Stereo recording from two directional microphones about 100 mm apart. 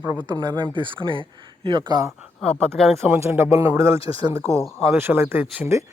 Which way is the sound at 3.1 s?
25° right (ahead or behind).